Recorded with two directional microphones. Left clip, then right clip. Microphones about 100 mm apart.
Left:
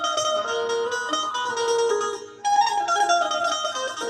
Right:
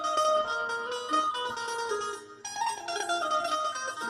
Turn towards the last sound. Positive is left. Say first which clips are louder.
# left 9 dB
turn(degrees=25)  # may be behind; listen again after turning